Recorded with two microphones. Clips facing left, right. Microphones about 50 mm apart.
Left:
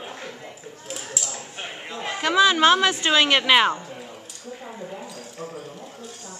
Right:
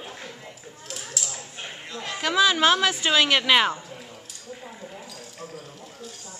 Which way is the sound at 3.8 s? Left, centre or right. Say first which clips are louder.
Left 4 dB; centre.